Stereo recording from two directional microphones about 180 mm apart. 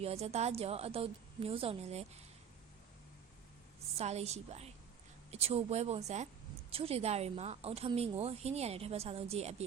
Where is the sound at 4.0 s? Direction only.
35° right (ahead or behind).